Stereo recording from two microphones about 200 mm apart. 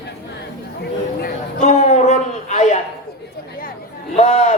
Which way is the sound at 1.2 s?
35° left (ahead or behind).